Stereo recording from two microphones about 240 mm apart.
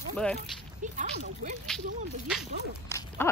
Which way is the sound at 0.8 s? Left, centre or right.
Right.